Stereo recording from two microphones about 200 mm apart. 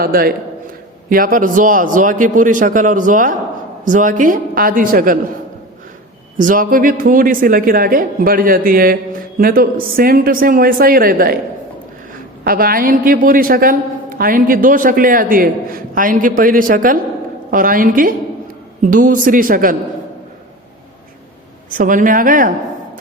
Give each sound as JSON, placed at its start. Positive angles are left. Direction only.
{"t": 0.0, "sound": "a woman's voice", "side_deg": -50}
{"t": 6.3, "sound": "a woman's voice", "side_deg": -40}
{"t": 12.5, "sound": "a woman's voice", "side_deg": -45}
{"t": 21.7, "sound": "a woman's voice", "side_deg": -40}